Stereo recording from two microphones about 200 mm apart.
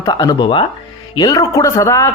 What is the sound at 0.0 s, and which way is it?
A man's voice, 20° left (ahead or behind).